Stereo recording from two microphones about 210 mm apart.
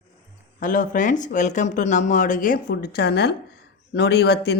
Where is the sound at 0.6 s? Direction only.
40° left (ahead or behind).